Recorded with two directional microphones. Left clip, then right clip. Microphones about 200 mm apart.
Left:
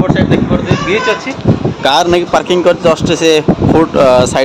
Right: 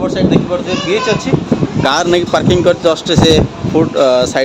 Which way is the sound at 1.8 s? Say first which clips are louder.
Left 2 dB; centre (ahead or behind).